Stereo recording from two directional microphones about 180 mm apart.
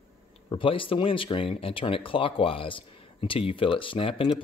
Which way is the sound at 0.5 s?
30° left (ahead or behind).